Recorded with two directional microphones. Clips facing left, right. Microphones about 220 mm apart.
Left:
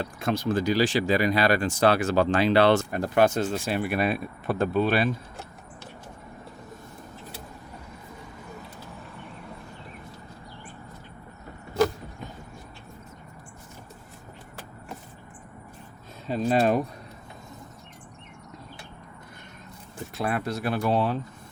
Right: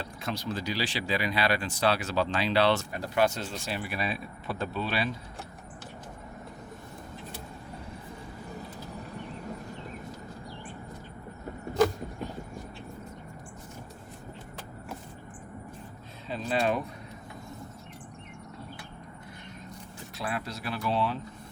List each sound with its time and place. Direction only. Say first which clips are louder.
0.0 s speech: left 7 dB; 50° left (ahead or behind)
16.2 s a sound: left 6 dB; 45° left (ahead or behind)
20.1 s speech: left 7 dB; 55° left (ahead or behind)